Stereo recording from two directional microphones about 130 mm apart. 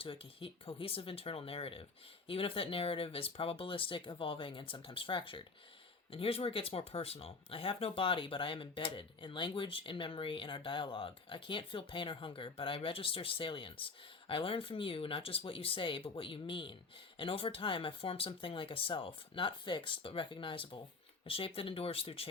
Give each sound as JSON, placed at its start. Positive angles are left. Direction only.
{"t": 0.0, "sound": "speech", "side_deg": 45}